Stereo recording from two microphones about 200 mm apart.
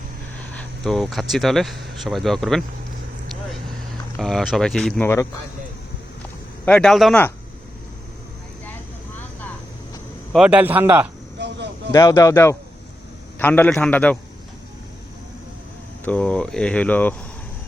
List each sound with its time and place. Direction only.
0.5 s speech: centre (ahead or behind)
4.2 s speech: centre (ahead or behind)
6.7 s speech: 5° left (ahead or behind)
10.3 s speech: 5° right (ahead or behind)
11.3 s a sound: 60° right (ahead or behind)
11.9 s speech: 15° left (ahead or behind)
16.0 s speech: 5° left (ahead or behind)